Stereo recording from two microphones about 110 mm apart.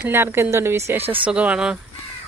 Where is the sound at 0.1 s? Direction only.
20° right (ahead or behind).